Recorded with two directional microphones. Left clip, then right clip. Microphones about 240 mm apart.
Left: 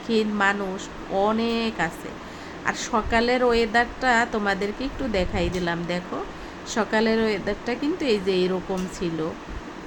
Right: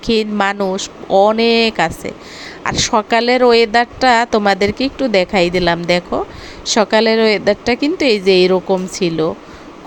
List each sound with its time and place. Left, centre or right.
0.0 s speech: right